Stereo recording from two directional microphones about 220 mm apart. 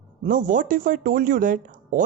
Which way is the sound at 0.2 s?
35° right (ahead or behind).